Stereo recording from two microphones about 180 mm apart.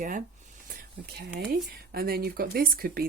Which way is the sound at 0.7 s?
60° right (ahead or behind).